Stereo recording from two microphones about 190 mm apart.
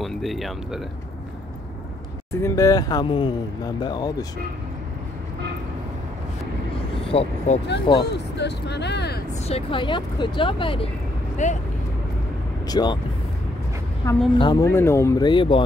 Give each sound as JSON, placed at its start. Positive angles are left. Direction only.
{"t": 0.0, "sound": "speech", "side_deg": 0}
{"t": 2.3, "sound": "speech", "side_deg": 15}
{"t": 7.1, "sound": "speech", "side_deg": 35}
{"t": 8.0, "sound": "speech", "side_deg": 60}
{"t": 9.5, "sound": "speech", "side_deg": 30}
{"t": 11.4, "sound": "speech", "side_deg": 40}
{"t": 12.6, "sound": "speech", "side_deg": 20}
{"t": 14.0, "sound": "a woman's voice", "side_deg": 15}